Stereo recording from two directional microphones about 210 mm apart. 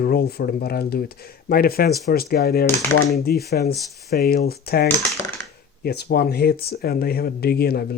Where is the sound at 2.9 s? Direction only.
90° left.